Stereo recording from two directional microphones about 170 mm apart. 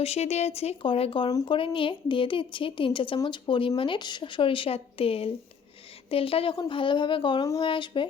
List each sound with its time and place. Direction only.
0.0 s a woman's voice: 40° left (ahead or behind)